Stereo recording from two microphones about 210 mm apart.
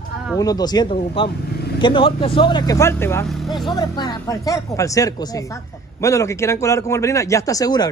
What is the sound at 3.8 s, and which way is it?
Speech, 20° left (ahead or behind).